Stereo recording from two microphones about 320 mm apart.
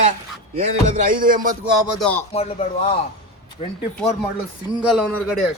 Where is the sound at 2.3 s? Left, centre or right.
Centre.